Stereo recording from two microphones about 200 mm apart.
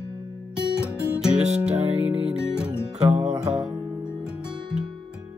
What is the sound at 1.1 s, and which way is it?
Music, 5° right (ahead or behind).